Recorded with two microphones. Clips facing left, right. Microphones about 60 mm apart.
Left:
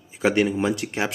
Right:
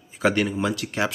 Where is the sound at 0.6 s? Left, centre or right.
Left.